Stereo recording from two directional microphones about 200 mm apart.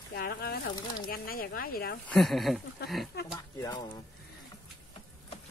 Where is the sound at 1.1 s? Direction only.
45° left (ahead or behind).